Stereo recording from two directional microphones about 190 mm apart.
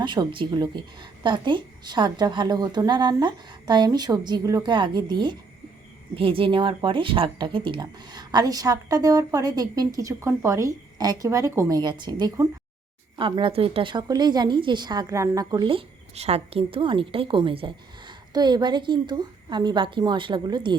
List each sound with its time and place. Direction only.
0.0 s a woman's voice: 25° right (ahead or behind)